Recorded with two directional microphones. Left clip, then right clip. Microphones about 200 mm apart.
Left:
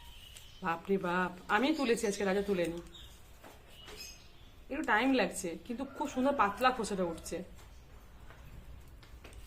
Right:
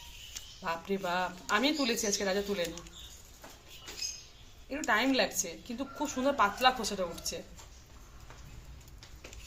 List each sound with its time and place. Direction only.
0.6 s a woman's voice: 40° left (ahead or behind)
4.7 s a woman's voice: 40° left (ahead or behind)